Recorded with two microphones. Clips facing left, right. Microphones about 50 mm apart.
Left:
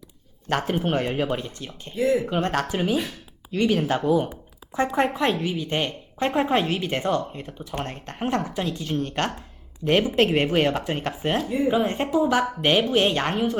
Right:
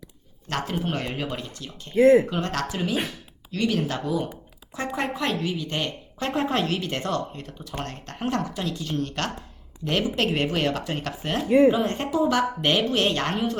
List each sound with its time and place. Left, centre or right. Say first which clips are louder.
0.4 s a woman's voice: left 4 dB; left
2.0 s speech: right 6 dB; right
2.4 s a woman's voice: left 3 dB; left